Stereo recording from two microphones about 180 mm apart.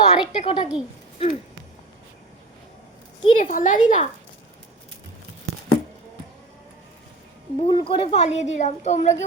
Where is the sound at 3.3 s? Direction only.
45° left (ahead or behind).